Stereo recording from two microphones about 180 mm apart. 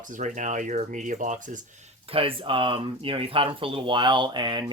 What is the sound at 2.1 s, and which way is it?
Speech, 30° right (ahead or behind).